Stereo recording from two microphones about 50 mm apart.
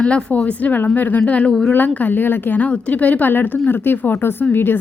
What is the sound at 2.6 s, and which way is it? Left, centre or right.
A woman's voice, left.